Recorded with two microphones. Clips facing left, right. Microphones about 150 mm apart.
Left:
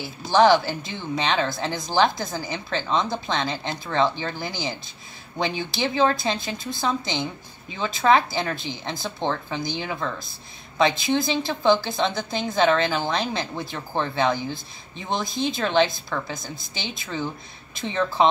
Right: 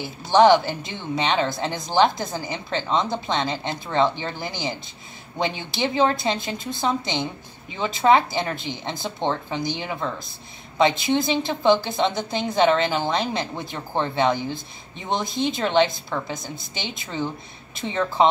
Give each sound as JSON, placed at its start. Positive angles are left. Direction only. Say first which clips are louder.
{"t": 0.0, "sound": "a woman's voice", "louder": "right 2 dB", "side_deg": -20}